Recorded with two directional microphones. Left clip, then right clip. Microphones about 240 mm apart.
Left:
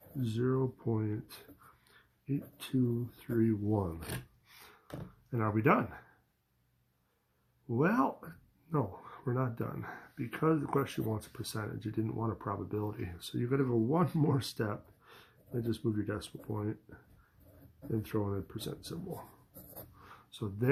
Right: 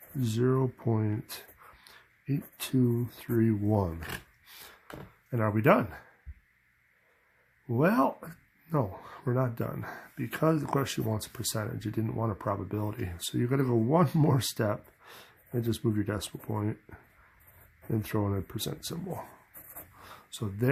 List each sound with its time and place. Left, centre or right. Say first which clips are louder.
0.2 s speech: right 5 dB; right
1.8 s a sound: right 9 dB; right
3.2 s speech: right 2 dB; right
5.3 s speech: right 5 dB; right
7.8 s speech: right 5 dB; right
17.9 s speech: right 4 dB; right